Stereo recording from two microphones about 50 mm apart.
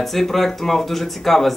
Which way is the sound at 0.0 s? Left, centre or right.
Centre.